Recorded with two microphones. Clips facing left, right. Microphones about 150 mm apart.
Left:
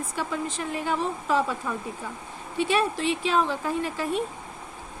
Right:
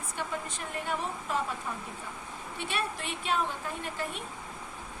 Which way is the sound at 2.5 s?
90° left.